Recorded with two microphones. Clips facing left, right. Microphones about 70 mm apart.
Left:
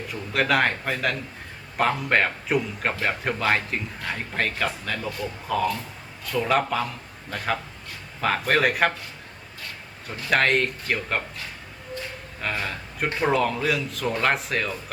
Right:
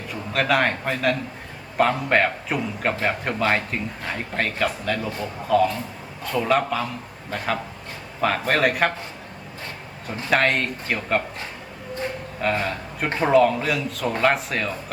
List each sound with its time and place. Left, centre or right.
0.1 s a man's voice: centre
5.0 s a man's voice: right
5.5 s a man's voice: centre
10.2 s a man's voice: centre
12.4 s a man's voice: centre